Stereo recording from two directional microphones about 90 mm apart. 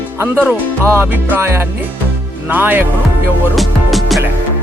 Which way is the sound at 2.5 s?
20° right (ahead or behind).